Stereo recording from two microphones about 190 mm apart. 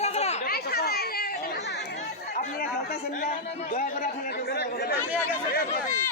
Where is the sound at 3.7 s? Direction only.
45° left (ahead or behind).